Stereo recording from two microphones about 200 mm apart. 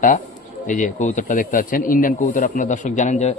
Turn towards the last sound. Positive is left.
turn(degrees=35)  # may be behind; listen again after turning